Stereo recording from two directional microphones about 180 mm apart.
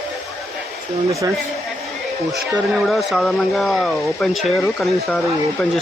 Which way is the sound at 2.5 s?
Centre (ahead or behind).